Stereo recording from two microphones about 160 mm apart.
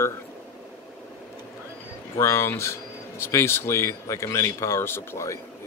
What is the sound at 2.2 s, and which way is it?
Speech, 15° left (ahead or behind).